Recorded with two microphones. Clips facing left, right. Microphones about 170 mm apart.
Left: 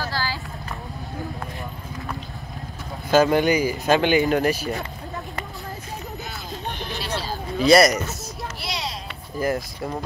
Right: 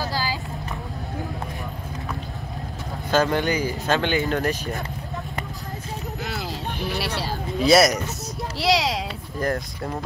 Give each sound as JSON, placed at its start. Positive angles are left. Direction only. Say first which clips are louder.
{"t": 0.0, "sound": "vehicle", "louder": "right 1 dB", "side_deg": -15}
{"t": 3.1, "sound": "speech", "louder": "left 4 dB", "side_deg": 10}
{"t": 7.5, "sound": "speech", "louder": "left 1 dB", "side_deg": 0}
{"t": 8.5, "sound": "a sound", "louder": "right 13 dB", "side_deg": -90}
{"t": 9.4, "sound": "speech", "louder": "left 1 dB", "side_deg": 5}